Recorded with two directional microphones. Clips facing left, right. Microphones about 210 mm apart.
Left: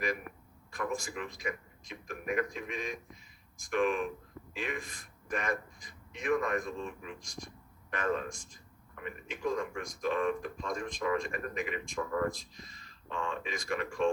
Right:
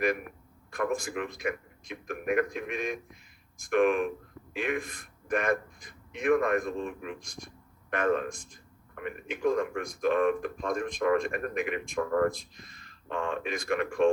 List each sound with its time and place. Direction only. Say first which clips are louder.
0.7 s a man's voice: right 6 dB; 60° right (ahead or behind)